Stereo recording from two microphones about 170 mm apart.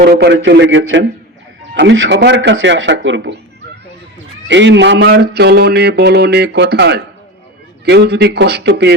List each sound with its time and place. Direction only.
0.0 s speech: 70° right (ahead or behind); by 3.3 s 90° right
4.4 s speech: 90° right